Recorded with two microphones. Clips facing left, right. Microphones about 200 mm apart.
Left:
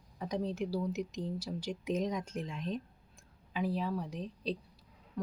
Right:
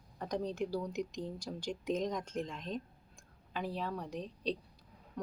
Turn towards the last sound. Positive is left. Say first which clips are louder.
# left 2 dB
turn(degrees=5)  # may be behind; listen again after turning